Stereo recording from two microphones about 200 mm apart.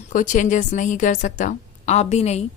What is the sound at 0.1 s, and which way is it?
Speech, 40° left (ahead or behind).